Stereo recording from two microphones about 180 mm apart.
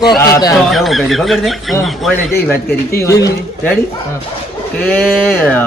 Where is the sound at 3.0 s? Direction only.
15° left (ahead or behind).